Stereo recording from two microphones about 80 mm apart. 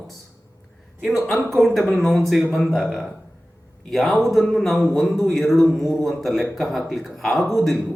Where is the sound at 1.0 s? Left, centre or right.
Centre.